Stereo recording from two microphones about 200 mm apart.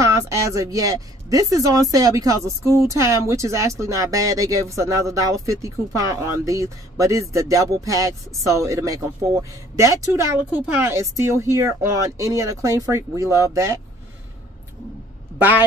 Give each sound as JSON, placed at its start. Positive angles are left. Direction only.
{"t": 0.0, "sound": "speech", "side_deg": -15}
{"t": 15.3, "sound": "speech", "side_deg": -10}